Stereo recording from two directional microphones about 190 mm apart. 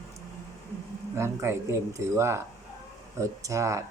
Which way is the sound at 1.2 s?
15° right (ahead or behind).